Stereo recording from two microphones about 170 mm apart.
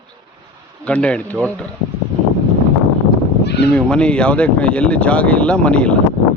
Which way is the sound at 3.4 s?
80° left.